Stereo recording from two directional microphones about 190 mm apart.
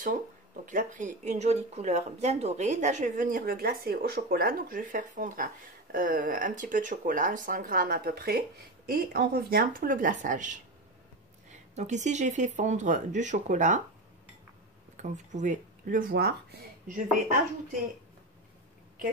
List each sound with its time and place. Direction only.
0.7 s speech: 40° right (ahead or behind)
15.0 s speech: 40° right (ahead or behind); by 16.3 s 55° right (ahead or behind)
16.8 s speech: 45° right (ahead or behind)